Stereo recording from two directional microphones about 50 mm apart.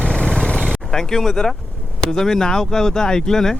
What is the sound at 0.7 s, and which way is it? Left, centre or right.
Speech, centre.